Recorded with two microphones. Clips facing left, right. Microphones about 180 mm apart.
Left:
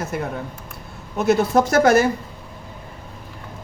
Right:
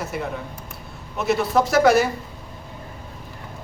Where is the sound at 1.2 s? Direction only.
50° left (ahead or behind).